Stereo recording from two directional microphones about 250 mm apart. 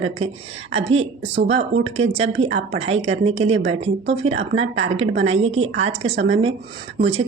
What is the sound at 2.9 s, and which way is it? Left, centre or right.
Speech, right.